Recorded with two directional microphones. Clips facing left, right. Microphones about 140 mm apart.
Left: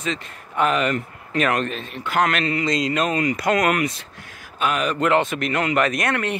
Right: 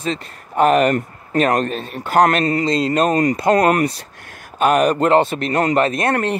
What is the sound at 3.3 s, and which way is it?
Speech, 30° right (ahead or behind).